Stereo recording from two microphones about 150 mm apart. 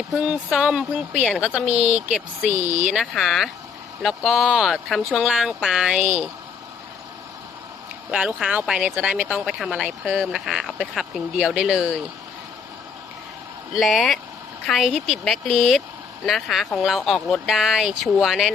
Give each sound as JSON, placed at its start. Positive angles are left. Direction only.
{"t": 0.1, "sound": "speech", "side_deg": -5}
{"t": 1.6, "sound": "speech", "side_deg": -45}
{"t": 2.0, "sound": "speech", "side_deg": -5}
{"t": 8.1, "sound": "speech", "side_deg": -5}
{"t": 13.7, "sound": "speech", "side_deg": 0}